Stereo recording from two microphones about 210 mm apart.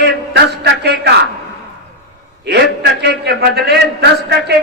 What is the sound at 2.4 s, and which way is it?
A man's voice, 50° right (ahead or behind).